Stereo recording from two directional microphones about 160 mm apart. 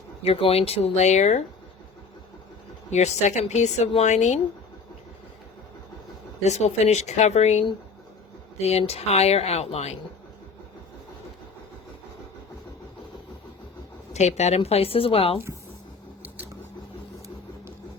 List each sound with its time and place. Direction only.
0.2 s speech: 40° left (ahead or behind)
2.9 s speech: 45° left (ahead or behind)
6.4 s speech: 45° left (ahead or behind)
14.1 s speech: 45° left (ahead or behind)